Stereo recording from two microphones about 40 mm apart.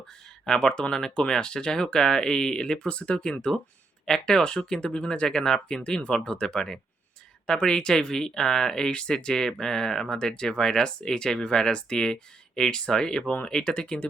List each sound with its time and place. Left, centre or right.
0.4 s speech: centre
4.0 s speech: centre
5.3 s speech: centre